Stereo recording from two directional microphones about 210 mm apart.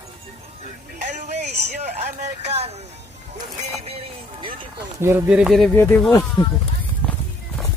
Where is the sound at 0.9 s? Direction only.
35° right (ahead or behind).